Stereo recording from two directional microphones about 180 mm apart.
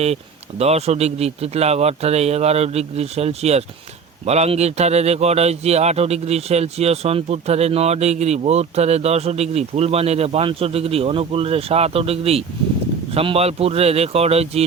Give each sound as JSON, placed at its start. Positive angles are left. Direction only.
{"t": 0.6, "sound": "speech", "side_deg": -35}